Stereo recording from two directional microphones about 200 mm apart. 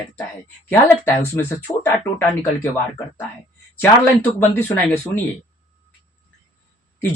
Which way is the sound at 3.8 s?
10° left (ahead or behind).